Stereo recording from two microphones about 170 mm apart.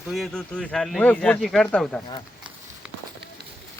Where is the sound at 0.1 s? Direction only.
Centre (ahead or behind).